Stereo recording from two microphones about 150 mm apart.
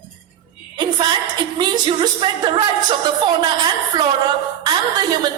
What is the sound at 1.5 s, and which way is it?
A man's voice, 30° right (ahead or behind).